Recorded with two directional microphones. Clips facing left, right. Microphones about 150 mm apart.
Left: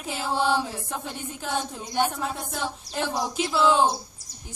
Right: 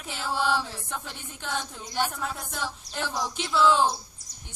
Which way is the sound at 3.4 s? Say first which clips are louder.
Left 1 dB; 5° left (ahead or behind).